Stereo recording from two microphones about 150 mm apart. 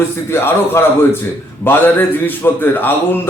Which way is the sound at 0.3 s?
15° left (ahead or behind).